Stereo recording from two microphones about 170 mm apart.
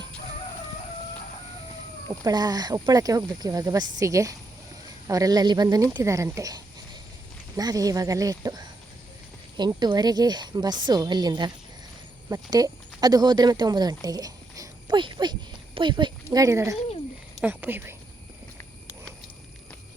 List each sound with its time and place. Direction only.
2.2 s speech: 20° right (ahead or behind)